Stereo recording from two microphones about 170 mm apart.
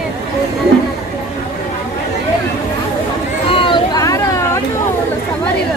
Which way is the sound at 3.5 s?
30° left (ahead or behind).